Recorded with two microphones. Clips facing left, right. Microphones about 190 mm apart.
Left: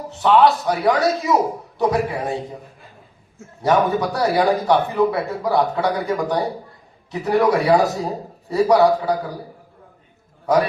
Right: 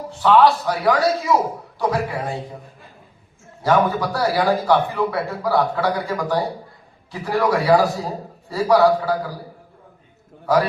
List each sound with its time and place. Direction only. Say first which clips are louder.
0.1 s a man's voice: even; 20° left (ahead or behind)
3.6 s a man's voice: left 1 dB; 20° left (ahead or behind)